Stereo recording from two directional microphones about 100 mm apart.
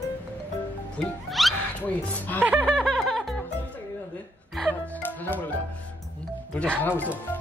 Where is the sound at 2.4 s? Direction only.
10° right (ahead or behind).